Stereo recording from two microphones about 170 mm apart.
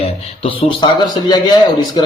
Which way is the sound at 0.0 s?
30° left (ahead or behind).